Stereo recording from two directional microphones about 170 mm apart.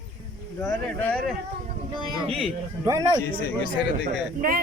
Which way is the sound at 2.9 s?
20° right (ahead or behind).